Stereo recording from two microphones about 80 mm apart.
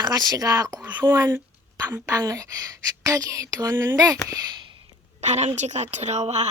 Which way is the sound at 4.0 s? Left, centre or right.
Right.